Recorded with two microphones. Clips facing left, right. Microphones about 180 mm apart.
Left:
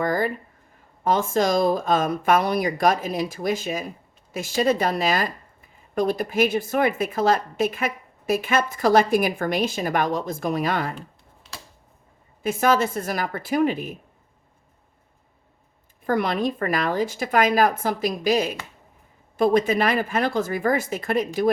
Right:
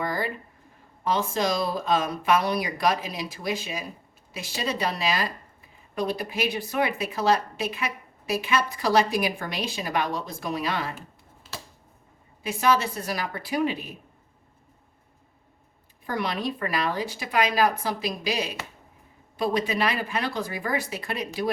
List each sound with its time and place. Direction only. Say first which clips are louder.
0.0 s a sound: left 6 dB; 50° left (ahead or behind)
1.0 s speech: left 4 dB; 50° left (ahead or behind)
12.4 s speech: left 3 dB; 50° left (ahead or behind)
16.0 s speech: left 6 dB; 50° left (ahead or behind)